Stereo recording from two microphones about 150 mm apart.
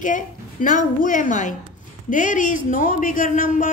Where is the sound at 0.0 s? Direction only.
60° left (ahead or behind).